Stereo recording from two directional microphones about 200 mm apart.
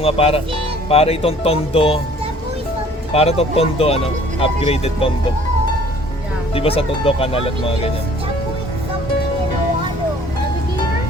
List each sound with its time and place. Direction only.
0.0 s speech: 30° left (ahead or behind)
3.1 s speech: 30° left (ahead or behind)
6.5 s speech: 30° left (ahead or behind)